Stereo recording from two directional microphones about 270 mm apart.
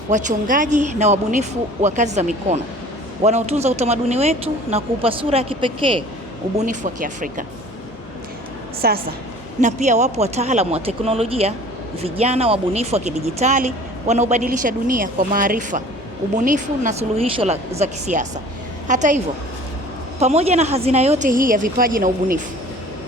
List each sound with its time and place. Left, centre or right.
0.1 s speech: right
8.8 s a woman's voice: right